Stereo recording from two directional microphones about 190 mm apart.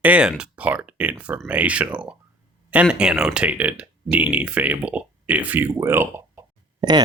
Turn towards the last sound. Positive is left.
turn(degrees=-20)  # may be behind; listen again after turning